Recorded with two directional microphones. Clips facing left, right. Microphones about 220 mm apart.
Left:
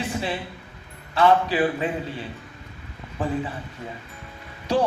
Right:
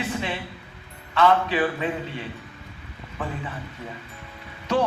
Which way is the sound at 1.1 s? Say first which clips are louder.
Left 1 dB; 30° left (ahead or behind).